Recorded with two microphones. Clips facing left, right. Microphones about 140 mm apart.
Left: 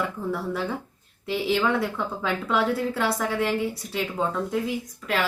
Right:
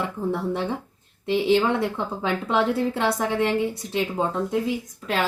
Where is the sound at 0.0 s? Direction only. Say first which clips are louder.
Right 2 dB; 25° right (ahead or behind).